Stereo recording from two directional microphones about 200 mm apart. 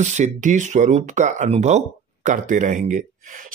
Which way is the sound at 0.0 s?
35° right (ahead or behind).